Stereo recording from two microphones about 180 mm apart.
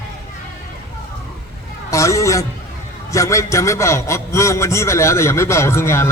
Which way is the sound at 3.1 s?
15° left (ahead or behind).